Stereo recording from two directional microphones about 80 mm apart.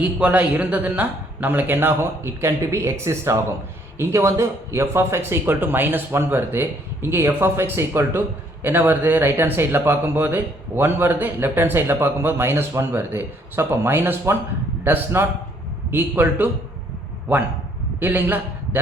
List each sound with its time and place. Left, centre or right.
0.0 s speech: centre
18.0 s a man's voice: right